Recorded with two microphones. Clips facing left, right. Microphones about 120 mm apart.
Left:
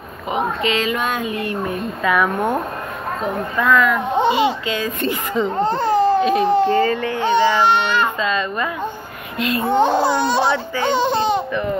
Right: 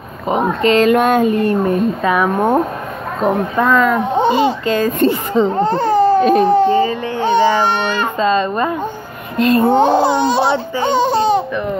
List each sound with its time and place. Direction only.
0.3 s a child's voice: 40° right (ahead or behind)
5.6 s speech: 45° right (ahead or behind)
6.7 s speech: 15° right (ahead or behind)
7.2 s a child's voice: 40° right (ahead or behind)
9.9 s a child's voice: 25° right (ahead or behind)